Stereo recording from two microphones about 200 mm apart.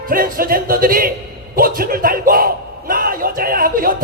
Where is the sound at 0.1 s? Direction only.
45° right (ahead or behind).